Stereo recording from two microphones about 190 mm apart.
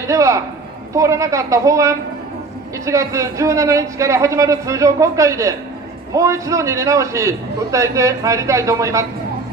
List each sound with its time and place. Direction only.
0.1 s a man's voice: 15° right (ahead or behind)